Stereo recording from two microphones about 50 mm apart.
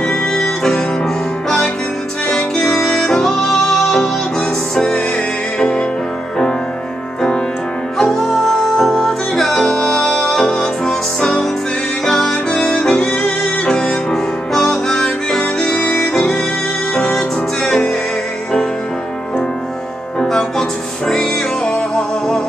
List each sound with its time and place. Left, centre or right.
0.0 s music: centre
3.0 s music: centre
8.0 s music: centre
14.1 s music: centre; by 16.0 s left
16.0 s violin: centre
16.9 s music: centre
20.2 s music: centre